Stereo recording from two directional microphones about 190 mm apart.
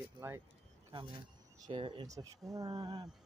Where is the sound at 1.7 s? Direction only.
25° right (ahead or behind).